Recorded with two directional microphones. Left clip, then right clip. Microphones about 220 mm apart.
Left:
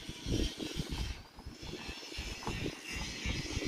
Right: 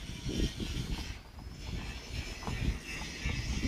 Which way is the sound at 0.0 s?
5° left (ahead or behind).